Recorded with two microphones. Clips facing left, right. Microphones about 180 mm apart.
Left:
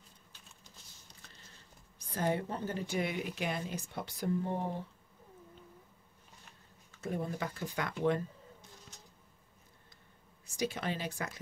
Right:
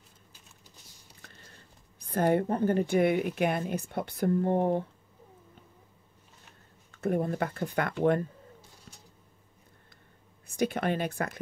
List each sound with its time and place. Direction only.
1.2 s speech: 55° right (ahead or behind)
6.9 s speech: 55° right (ahead or behind)
10.4 s speech: 60° right (ahead or behind)